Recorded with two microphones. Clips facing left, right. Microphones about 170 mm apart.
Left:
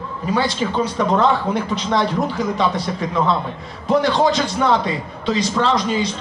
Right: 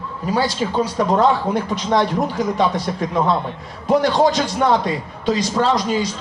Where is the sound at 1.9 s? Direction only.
15° right (ahead or behind).